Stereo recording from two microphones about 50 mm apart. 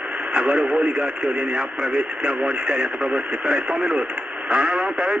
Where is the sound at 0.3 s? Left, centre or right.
Centre.